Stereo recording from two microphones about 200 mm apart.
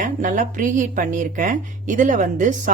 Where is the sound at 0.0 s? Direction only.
40° right (ahead or behind).